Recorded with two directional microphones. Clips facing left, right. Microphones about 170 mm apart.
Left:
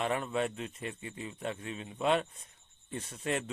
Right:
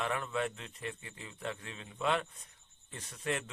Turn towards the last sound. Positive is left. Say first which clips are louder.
# left 3 dB
turn(degrees=25)  # may be behind; listen again after turning